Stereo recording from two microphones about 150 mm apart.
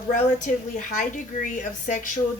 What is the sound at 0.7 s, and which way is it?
A woman's voice, 60° left (ahead or behind).